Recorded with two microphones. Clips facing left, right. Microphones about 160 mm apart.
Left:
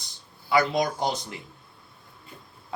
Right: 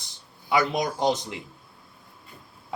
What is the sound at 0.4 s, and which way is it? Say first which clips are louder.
Speech: left 1 dB; 20° right (ahead or behind).